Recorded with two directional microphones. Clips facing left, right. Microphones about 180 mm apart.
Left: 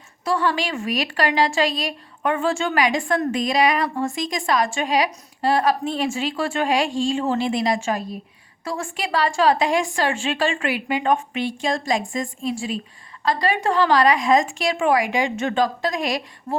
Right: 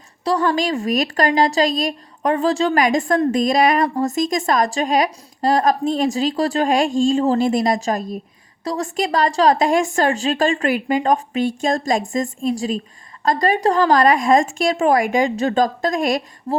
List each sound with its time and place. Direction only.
0.3 s a woman's voice: 40° right (ahead or behind)